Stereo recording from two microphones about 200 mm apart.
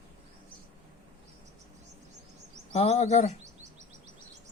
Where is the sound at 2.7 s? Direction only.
30° left (ahead or behind).